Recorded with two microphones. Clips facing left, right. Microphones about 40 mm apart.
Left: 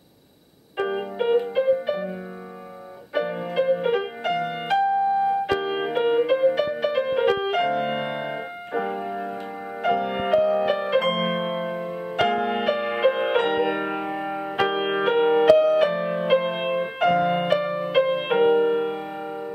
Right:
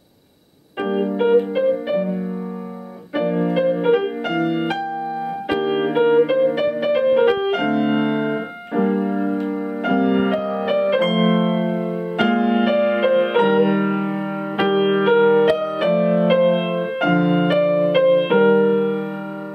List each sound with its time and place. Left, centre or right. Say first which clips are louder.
0.7 s music: right 5 dB; centre
3.2 s music: right 5 dB; centre
7.3 s keyboard: right 3 dB; centre
10.4 s piano: right 2 dB; centre
12.3 s music: right 7 dB; centre